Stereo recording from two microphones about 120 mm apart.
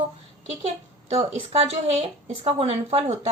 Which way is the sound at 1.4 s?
55° right (ahead or behind).